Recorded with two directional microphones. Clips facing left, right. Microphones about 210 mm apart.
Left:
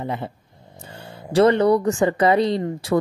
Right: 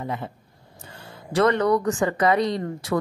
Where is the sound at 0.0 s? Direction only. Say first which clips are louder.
Left 3 dB; 25° left (ahead or behind).